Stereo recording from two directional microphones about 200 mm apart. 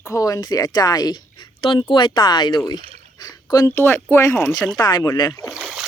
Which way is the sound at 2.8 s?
30° right (ahead or behind).